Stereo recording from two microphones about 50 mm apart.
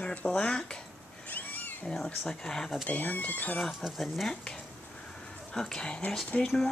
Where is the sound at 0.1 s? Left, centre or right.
Left.